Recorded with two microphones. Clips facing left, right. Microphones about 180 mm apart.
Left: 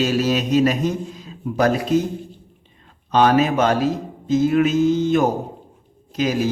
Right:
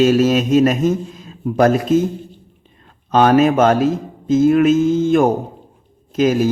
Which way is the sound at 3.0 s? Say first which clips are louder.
Right 4 dB; 50° right (ahead or behind).